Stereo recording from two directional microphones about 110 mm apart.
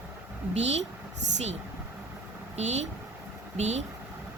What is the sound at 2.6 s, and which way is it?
Speech, 90° right.